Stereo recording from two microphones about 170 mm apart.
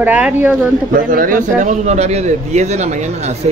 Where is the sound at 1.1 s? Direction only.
55° right (ahead or behind).